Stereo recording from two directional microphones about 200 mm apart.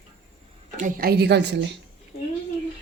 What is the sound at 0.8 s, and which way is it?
Speech, 45° right (ahead or behind).